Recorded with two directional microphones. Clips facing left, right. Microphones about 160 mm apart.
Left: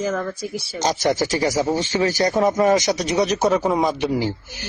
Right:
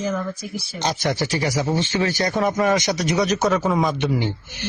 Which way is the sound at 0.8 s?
40° left (ahead or behind).